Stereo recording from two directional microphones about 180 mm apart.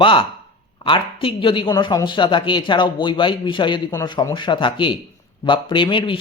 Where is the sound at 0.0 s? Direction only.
30° left (ahead or behind).